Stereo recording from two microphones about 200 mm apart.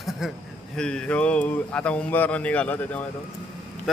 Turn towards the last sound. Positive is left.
turn(degrees=5)  # may be behind; listen again after turning